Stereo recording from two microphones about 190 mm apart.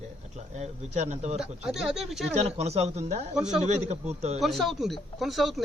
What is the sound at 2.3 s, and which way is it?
Speech, 35° right (ahead or behind).